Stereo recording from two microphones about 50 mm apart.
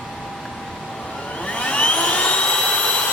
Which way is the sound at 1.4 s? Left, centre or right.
Left.